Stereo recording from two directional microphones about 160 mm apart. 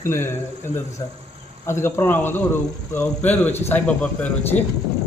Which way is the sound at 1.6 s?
15° left (ahead or behind).